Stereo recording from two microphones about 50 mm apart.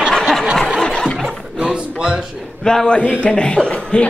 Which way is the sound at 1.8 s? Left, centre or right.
Centre.